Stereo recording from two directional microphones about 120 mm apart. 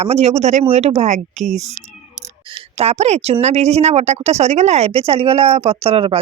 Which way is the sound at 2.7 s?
65° right (ahead or behind).